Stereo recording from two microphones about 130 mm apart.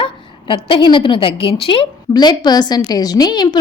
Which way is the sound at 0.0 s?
40° left (ahead or behind).